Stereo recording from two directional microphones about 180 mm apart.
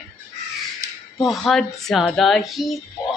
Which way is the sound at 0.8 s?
20° right (ahead or behind).